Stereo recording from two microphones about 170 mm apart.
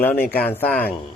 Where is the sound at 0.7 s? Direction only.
55° left (ahead or behind).